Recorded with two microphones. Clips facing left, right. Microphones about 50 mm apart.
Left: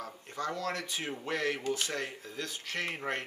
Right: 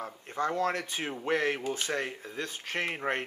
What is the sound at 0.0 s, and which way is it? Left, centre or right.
Speech, right.